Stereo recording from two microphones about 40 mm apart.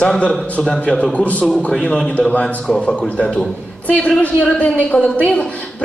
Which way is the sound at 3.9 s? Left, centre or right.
Left.